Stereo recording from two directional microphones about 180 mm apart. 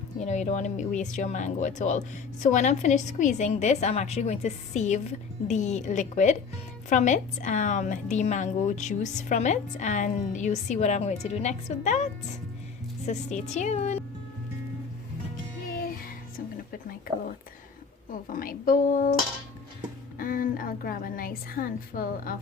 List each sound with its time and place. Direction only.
0.2 s speech: 40° left (ahead or behind)
18.3 s a woman's voice: 50° left (ahead or behind)
20.1 s a woman's voice: 50° left (ahead or behind)